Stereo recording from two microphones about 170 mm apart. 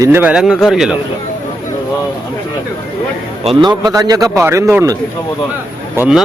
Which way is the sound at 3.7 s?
25° right (ahead or behind).